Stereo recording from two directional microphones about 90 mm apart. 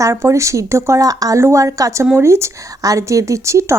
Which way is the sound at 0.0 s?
35° right (ahead or behind).